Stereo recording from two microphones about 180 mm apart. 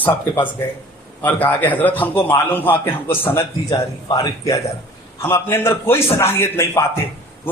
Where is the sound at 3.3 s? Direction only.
20° left (ahead or behind).